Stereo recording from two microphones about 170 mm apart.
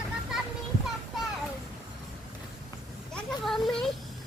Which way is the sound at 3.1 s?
Centre (ahead or behind).